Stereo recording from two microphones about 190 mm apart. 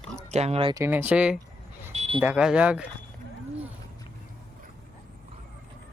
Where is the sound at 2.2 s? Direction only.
5° right (ahead or behind).